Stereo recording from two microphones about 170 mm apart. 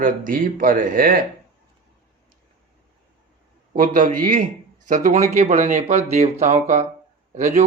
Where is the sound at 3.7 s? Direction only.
50° right (ahead or behind).